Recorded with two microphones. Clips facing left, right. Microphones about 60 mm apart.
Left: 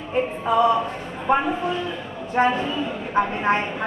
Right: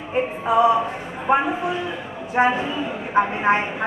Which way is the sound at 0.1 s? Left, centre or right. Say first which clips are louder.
Right 1 dB; centre.